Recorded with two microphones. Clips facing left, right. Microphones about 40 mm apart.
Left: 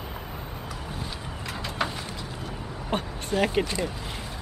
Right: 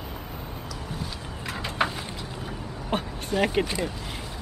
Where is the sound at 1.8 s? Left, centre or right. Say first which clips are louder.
Right 3 dB; centre.